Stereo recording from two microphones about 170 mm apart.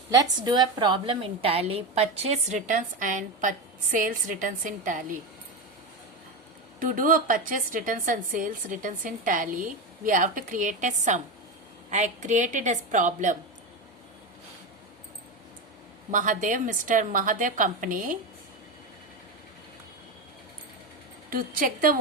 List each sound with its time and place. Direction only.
0.1 s a woman's voice: 25° right (ahead or behind); by 5.2 s 50° right (ahead or behind)
6.7 s a woman's voice: 50° right (ahead or behind)
16.1 s a woman's voice: 50° right (ahead or behind)
21.2 s a woman's voice: 55° right (ahead or behind)